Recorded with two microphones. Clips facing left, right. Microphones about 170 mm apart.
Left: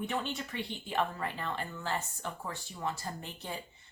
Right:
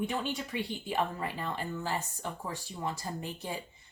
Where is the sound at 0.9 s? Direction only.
10° right (ahead or behind).